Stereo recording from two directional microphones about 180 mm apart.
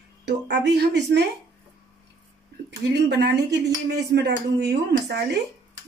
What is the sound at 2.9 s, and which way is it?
Speech, 65° right (ahead or behind).